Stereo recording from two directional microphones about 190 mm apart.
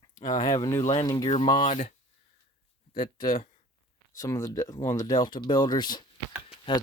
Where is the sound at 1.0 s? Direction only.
20° left (ahead or behind).